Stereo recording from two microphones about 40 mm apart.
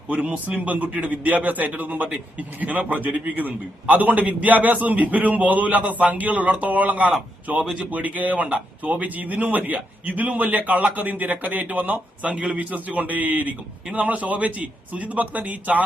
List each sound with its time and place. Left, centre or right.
0.1 s a man's voice: right